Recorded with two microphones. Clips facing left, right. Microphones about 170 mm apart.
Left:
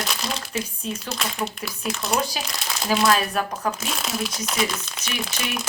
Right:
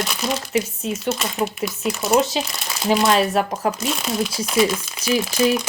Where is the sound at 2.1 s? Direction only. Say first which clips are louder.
Right 8 dB; 25° right (ahead or behind).